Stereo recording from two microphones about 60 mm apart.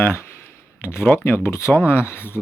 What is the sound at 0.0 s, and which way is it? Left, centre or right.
Speech, left.